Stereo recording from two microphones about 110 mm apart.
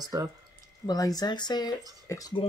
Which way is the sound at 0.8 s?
35° left (ahead or behind).